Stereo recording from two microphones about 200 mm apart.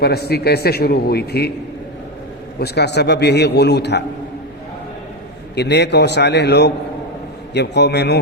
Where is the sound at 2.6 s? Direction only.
55° left (ahead or behind).